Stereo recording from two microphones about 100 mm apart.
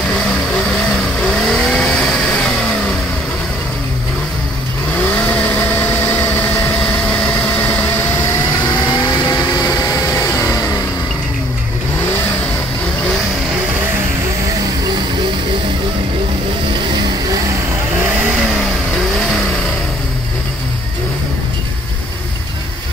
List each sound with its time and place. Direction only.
1.5 s vehicle: centre (ahead or behind)
8.8 s vehicle: 45° left (ahead or behind)
10.2 s music: 35° left (ahead or behind)